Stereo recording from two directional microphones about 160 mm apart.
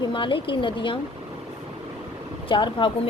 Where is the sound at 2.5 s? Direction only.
30° left (ahead or behind).